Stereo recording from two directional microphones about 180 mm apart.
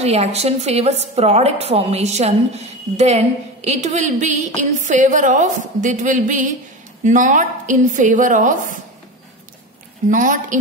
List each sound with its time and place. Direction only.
0.0 s a woman's voice: 35° right (ahead or behind)
10.0 s a woman's voice: 45° right (ahead or behind)